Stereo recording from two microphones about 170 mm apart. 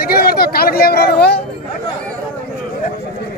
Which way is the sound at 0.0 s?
65° left (ahead or behind).